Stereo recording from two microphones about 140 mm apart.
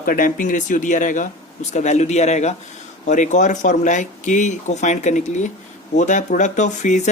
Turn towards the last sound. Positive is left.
turn(degrees=55)  # may be behind; listen again after turning